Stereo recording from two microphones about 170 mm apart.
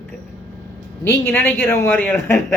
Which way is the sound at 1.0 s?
15° left (ahead or behind).